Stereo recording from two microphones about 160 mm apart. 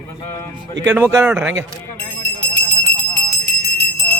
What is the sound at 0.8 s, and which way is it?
Speech, 15° right (ahead or behind).